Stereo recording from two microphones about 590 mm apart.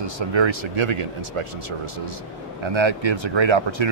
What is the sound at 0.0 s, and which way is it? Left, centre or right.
Speech, right.